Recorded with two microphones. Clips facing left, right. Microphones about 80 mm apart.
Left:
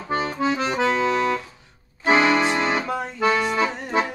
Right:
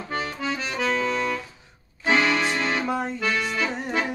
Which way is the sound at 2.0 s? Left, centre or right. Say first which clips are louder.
Left 4 dB; left.